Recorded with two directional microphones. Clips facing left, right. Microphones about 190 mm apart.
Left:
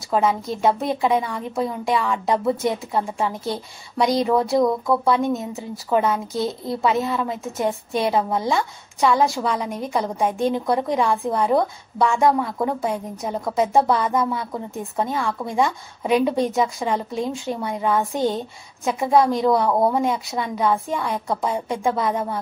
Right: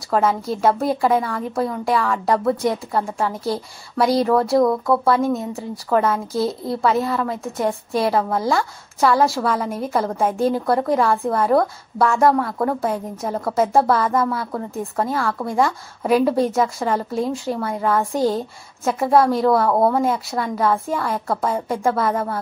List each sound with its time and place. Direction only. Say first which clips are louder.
0.1 s a woman's voice: right 1 dB; centre (ahead or behind)
8.1 s a woman's voice: left 1 dB; 20° left (ahead or behind)
9.3 s a woman's voice: right 2 dB; centre (ahead or behind)
12.4 s a woman's voice: right 2 dB; 10° left (ahead or behind)
14.1 s a woman's voice: right 2 dB; 15° left (ahead or behind)
14.8 s a woman's voice: right 2 dB; centre (ahead or behind)